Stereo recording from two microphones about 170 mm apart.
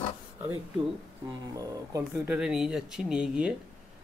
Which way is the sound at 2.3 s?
5° right (ahead or behind).